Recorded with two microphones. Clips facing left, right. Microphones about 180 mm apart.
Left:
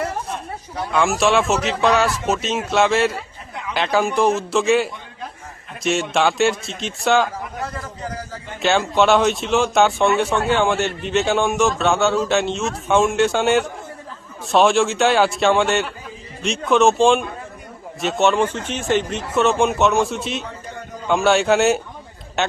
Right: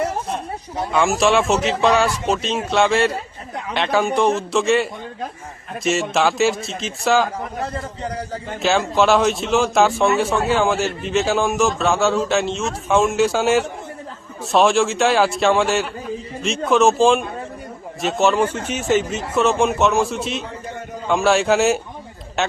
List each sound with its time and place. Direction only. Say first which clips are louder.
0.9 s a man's voice: right 1 dB; centre (ahead or behind)
7.6 s a man's voice: right 3 dB; 30° right (ahead or behind)
8.6 s a man's voice: even; centre (ahead or behind)